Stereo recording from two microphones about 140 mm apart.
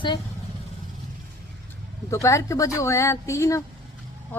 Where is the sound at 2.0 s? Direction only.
20° left (ahead or behind).